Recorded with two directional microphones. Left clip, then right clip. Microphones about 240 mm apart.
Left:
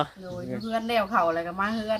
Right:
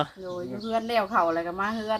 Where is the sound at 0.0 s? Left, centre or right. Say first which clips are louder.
Even; centre.